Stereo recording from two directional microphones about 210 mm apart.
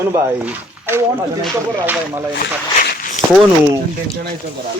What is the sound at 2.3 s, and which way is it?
Speech, 50° left (ahead or behind).